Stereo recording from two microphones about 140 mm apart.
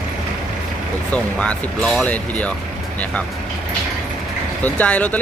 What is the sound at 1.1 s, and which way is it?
Speech, 10° left (ahead or behind).